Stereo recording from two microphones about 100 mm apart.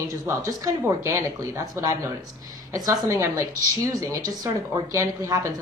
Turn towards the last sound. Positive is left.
turn(degrees=-35)  # may be behind; listen again after turning